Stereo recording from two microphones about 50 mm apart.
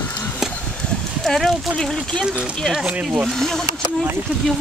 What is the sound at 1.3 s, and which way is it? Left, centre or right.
Speech, centre.